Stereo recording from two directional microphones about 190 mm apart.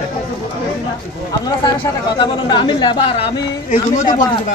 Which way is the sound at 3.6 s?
40° left (ahead or behind).